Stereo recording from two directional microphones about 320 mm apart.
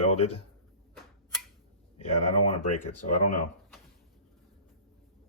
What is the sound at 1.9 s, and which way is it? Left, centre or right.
Speech, centre.